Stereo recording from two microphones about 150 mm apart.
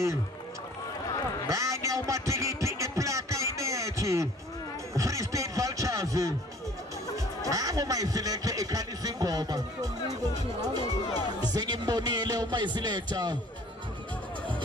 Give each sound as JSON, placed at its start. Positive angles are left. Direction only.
{"t": 1.5, "sound": "music", "side_deg": -20}
{"t": 4.9, "sound": "speech", "side_deg": -20}
{"t": 7.4, "sound": "a man's voice", "side_deg": -25}